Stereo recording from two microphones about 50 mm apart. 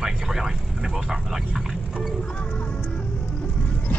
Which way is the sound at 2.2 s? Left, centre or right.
Left.